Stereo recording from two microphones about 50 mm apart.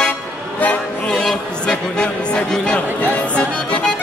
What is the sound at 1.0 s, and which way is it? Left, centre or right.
A man's voice, centre.